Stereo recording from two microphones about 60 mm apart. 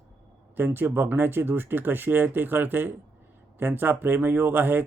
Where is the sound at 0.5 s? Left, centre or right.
Right.